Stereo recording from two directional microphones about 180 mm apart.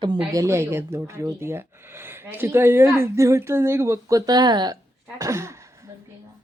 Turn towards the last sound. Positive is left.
turn(degrees=-15)  # may be behind; listen again after turning